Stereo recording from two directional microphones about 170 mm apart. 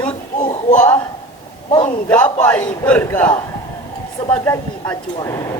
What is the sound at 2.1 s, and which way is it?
Speech, 10° left (ahead or behind).